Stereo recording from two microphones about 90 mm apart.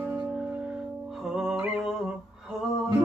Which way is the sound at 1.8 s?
5° right (ahead or behind).